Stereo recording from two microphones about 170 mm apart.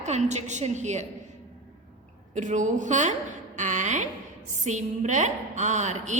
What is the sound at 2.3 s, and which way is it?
Speech, 45° right (ahead or behind).